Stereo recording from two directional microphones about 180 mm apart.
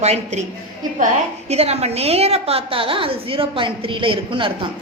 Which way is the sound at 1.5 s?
35° right (ahead or behind).